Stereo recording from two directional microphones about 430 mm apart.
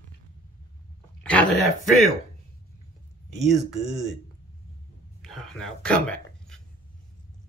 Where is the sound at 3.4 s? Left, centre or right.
Centre.